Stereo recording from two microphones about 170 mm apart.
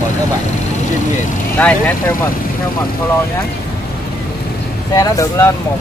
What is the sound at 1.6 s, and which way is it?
Speech, 10° left (ahead or behind).